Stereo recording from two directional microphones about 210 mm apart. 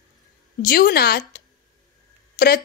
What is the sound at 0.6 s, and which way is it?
Speech, 45° left (ahead or behind).